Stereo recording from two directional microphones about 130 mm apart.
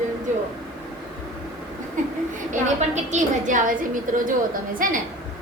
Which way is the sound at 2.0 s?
80° right.